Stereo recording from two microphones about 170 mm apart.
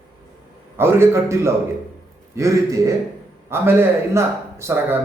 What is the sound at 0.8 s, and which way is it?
A man's voice, 15° right (ahead or behind).